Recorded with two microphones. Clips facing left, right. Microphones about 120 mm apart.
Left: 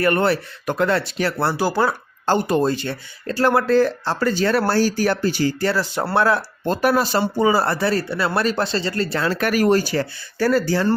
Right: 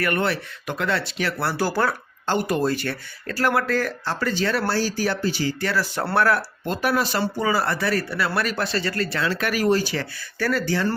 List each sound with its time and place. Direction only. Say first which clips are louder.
0.0 s speech: left 5 dB; 35° left (ahead or behind)
1.5 s speech: left 3 dB; 15° left (ahead or behind); by 5.5 s 50° left (ahead or behind)
5.5 s speech: left 4 dB; 30° left (ahead or behind)
6.7 s speech: left 5 dB; 40° left (ahead or behind)
7.2 s speech: left 5 dB; 25° left (ahead or behind)
9.2 s speech: left 4 dB; 45° left (ahead or behind)